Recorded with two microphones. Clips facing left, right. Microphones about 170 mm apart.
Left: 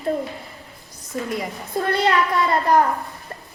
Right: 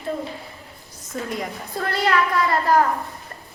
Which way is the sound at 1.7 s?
20° left (ahead or behind).